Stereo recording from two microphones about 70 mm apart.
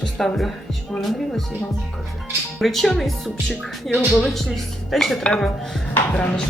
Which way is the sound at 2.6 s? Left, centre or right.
Centre.